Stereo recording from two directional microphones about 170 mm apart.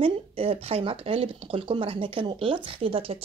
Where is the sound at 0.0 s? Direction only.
35° right (ahead or behind).